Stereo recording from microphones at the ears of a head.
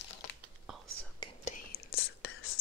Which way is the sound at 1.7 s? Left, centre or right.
Left.